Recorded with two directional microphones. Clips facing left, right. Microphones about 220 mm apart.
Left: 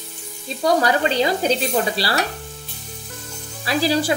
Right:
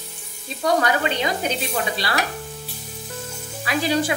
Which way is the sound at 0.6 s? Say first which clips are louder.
Left 2 dB; 35° left (ahead or behind).